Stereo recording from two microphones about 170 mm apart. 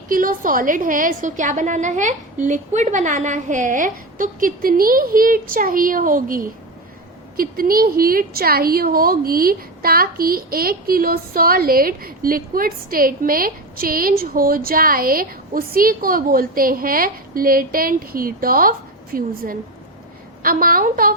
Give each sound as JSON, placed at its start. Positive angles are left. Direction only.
{"t": 0.1, "sound": "a woman's voice", "side_deg": -55}